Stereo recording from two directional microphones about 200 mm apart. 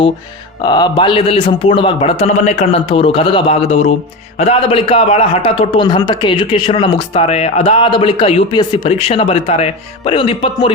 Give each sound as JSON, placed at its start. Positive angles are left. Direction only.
{"t": 0.6, "sound": "a man's voice", "side_deg": 20}